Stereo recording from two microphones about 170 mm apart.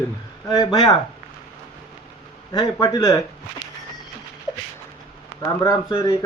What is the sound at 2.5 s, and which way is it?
Speech, 25° left (ahead or behind).